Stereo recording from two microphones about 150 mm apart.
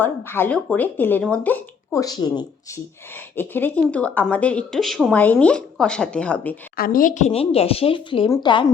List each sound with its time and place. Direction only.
0.0 s speech: 15° left (ahead or behind)
2.0 s a woman's voice: 25° left (ahead or behind)
3.3 s speech: 15° left (ahead or behind)
6.7 s speech: 70° left (ahead or behind); by 8.6 s 30° left (ahead or behind)